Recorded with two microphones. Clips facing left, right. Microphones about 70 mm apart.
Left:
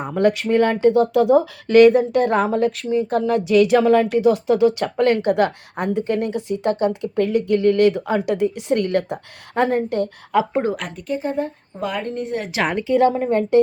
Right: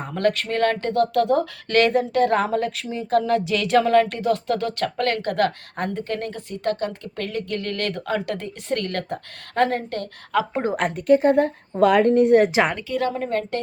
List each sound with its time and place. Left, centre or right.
0.0 s speech: centre
10.8 s speech: right
12.7 s a woman's voice: left